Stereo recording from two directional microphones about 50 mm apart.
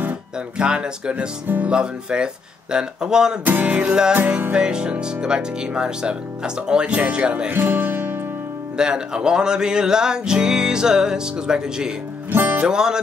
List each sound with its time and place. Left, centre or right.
0.6 s speech: centre
1.7 s music: centre
3.4 s music: right
3.8 s music: centre
7.1 s speech: right
7.5 s music: right
8.7 s music: centre
12.3 s music: right
12.6 s music: centre